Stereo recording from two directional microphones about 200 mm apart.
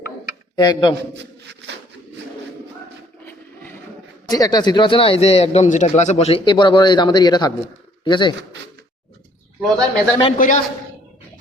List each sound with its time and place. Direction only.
0.5 s speech: 20° left (ahead or behind)
1.1 s a sound: 60° right (ahead or behind)
4.3 s speech: 20° left (ahead or behind)
9.6 s a man's voice: centre (ahead or behind)
10.3 s a man's voice: 40° left (ahead or behind)